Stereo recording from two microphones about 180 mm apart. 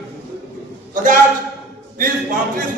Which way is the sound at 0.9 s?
45° right (ahead or behind).